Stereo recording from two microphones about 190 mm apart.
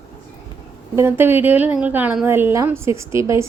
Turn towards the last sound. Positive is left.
turn(degrees=-15)  # may be behind; listen again after turning